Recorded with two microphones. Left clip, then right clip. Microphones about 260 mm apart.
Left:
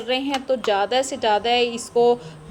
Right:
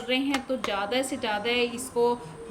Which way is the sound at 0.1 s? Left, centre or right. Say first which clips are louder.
Left 5 dB; centre.